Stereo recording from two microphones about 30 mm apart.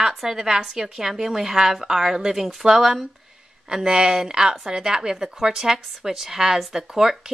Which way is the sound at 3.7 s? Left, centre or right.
Right.